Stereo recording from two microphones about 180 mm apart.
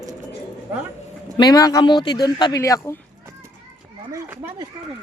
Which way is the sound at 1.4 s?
20° left (ahead or behind).